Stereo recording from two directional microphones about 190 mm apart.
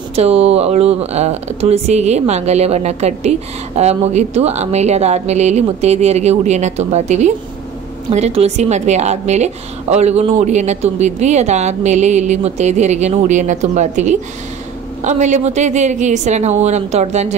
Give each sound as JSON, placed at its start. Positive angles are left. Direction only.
{"t": 0.1, "sound": "speech", "side_deg": -35}